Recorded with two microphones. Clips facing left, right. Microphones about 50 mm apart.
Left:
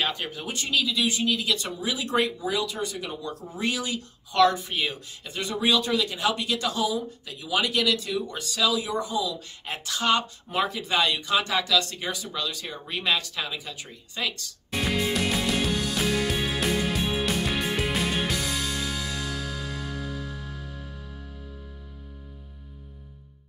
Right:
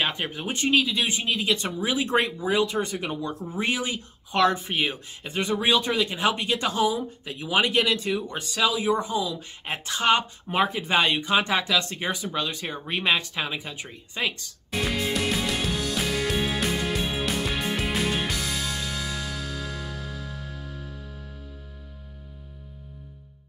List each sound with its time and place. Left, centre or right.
0.0 s speech: right
14.7 s music: centre